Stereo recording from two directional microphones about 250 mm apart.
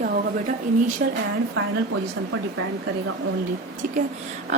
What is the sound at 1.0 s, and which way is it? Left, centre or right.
Speech, right.